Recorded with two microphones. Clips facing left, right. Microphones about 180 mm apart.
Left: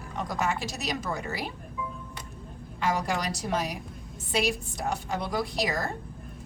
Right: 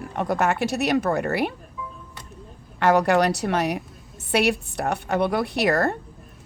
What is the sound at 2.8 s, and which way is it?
A woman's voice, 65° right (ahead or behind).